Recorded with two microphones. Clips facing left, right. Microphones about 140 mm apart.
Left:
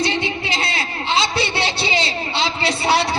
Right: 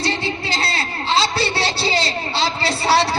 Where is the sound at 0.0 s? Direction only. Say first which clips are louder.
Left 1 dB; 35° right (ahead or behind).